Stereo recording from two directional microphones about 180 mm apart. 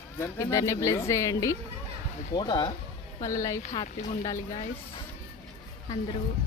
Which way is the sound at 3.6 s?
40° left (ahead or behind).